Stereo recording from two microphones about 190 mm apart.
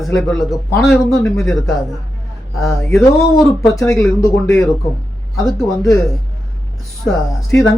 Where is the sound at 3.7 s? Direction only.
15° left (ahead or behind).